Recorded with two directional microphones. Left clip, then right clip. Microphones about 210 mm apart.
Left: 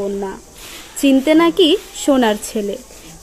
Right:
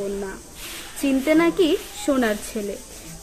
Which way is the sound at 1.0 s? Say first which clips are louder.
Left 7 dB; 35° left (ahead or behind).